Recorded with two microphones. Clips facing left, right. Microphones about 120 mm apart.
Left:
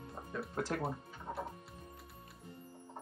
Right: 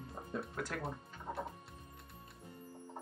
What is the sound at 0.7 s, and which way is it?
Speech, 30° left (ahead or behind).